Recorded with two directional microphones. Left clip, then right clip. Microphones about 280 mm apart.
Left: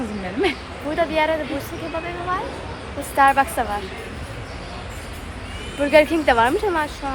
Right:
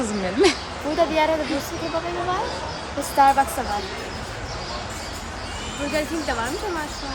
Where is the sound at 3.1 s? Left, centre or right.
Centre.